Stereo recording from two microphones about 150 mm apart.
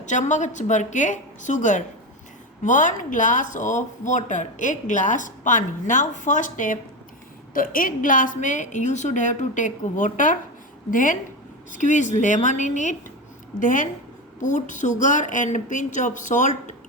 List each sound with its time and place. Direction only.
0.0 s speech: 55° left (ahead or behind)